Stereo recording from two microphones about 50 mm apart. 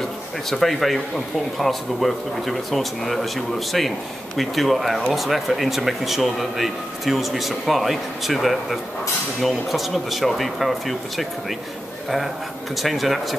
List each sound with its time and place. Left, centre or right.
0.5 s speech: centre
12.7 s speech: centre